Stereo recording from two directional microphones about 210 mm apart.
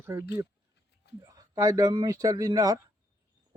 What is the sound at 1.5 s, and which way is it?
Speech, 15° right (ahead or behind).